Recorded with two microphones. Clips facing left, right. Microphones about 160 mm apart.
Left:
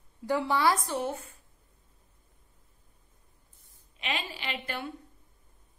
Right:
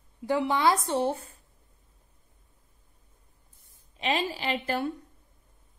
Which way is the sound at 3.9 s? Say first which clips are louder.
Right 7 dB; 35° right (ahead or behind).